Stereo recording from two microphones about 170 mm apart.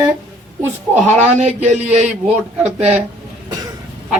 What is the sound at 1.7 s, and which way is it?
Speech, 40° right (ahead or behind).